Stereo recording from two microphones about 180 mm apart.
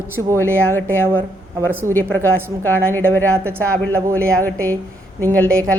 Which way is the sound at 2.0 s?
10° left (ahead or behind).